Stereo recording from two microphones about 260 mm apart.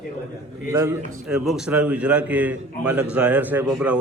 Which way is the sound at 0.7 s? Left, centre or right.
Centre.